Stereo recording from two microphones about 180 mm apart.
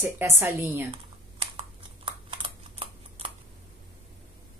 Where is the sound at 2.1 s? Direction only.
30° right (ahead or behind).